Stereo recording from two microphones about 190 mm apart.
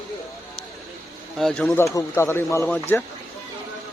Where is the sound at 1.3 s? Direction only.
Centre (ahead or behind).